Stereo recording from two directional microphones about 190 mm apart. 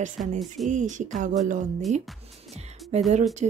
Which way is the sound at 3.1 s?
35° right (ahead or behind).